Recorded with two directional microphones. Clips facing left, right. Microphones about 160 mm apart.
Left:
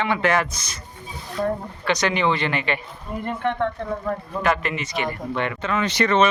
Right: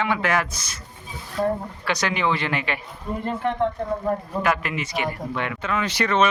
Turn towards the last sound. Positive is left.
turn(degrees=-5)  # may be behind; listen again after turning